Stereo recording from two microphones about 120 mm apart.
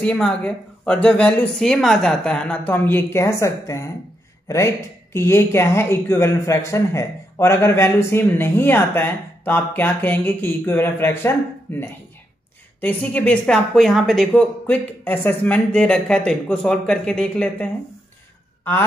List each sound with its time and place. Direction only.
0.0 s a woman's voice: 5° left (ahead or behind)